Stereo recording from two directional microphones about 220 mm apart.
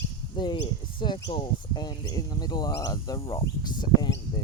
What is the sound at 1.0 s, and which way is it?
Speech, 20° left (ahead or behind).